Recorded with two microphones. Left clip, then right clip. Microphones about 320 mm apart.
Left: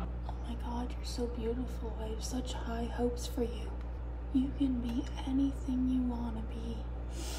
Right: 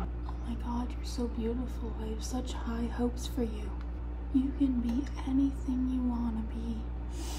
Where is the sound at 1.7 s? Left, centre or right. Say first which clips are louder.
Right 1 dB; centre.